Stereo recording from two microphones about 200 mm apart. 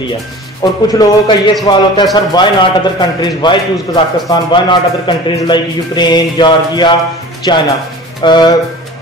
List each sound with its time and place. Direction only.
0.6 s a man's voice: 20° left (ahead or behind)